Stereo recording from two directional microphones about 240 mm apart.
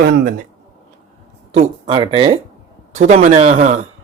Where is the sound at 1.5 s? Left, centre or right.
Right.